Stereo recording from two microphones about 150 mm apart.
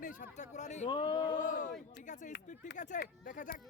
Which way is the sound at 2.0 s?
55° left (ahead or behind).